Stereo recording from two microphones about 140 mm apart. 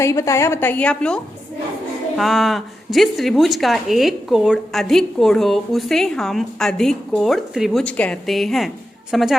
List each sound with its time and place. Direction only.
0.0 s a woman's voice: 20° left (ahead or behind); by 9.3 s centre (ahead or behind)